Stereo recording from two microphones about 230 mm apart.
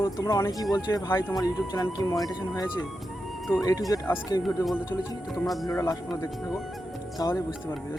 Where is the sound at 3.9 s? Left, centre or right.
Centre.